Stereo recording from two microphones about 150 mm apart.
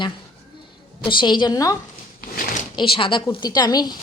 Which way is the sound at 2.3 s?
70° left (ahead or behind).